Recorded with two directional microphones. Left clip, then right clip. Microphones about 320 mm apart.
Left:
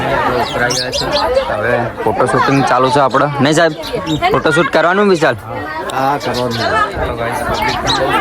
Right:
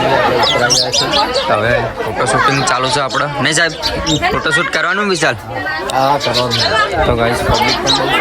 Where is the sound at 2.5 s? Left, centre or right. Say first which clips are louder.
Left 3 dB; centre.